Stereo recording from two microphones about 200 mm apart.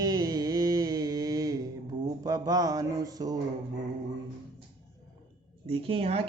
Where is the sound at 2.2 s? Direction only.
20° right (ahead or behind).